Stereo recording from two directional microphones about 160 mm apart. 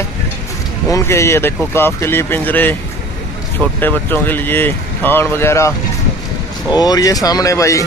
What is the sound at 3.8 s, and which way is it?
Speech, 10° left (ahead or behind).